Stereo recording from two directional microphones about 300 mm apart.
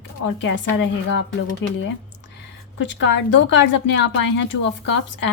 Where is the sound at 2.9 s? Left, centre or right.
Left.